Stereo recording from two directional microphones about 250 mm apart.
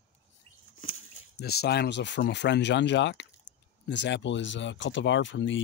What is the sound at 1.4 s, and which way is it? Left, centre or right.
Speech, left.